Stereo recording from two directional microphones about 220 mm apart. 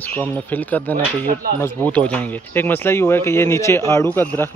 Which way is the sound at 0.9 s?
40° right (ahead or behind).